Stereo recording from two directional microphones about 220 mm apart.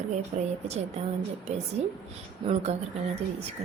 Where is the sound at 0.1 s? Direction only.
30° right (ahead or behind).